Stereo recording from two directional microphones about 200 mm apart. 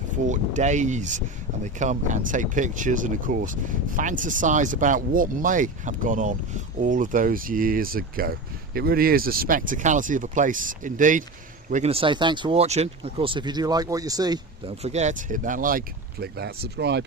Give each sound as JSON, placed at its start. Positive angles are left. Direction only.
{"t": 0.3, "sound": "speech", "side_deg": -35}
{"t": 14.8, "sound": "speech", "side_deg": -35}
{"t": 16.2, "sound": "speech", "side_deg": -55}